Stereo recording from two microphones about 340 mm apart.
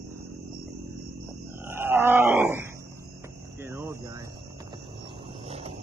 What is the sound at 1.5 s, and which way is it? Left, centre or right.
Wild animals, centre.